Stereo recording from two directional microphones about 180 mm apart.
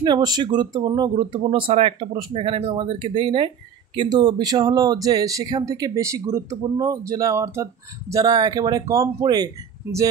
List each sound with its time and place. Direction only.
0.0 s speech: 25° right (ahead or behind)